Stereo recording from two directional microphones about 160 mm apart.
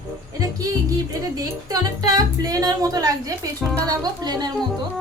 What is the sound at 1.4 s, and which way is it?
Speech, 25° right (ahead or behind).